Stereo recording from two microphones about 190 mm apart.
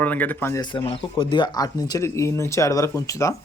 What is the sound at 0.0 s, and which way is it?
Speech, 10° left (ahead or behind).